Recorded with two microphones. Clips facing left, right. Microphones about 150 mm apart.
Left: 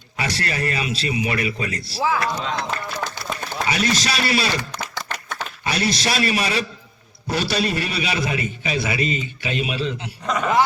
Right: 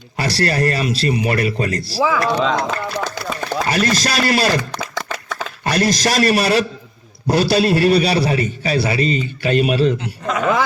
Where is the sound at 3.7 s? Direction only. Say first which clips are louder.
Right 4 dB; 40° right (ahead or behind).